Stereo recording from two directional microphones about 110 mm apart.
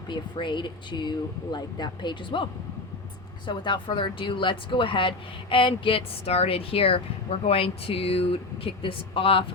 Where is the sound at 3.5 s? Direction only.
45° left (ahead or behind).